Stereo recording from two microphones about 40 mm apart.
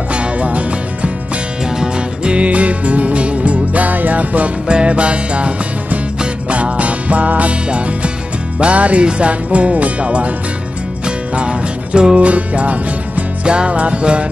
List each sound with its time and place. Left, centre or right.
0.1 s music: right
2.2 s music: right
4.6 s music: right
6.5 s music: right
12.2 s music: right